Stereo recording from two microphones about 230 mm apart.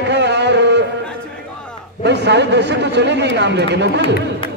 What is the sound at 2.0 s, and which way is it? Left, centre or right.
A man's voice, right.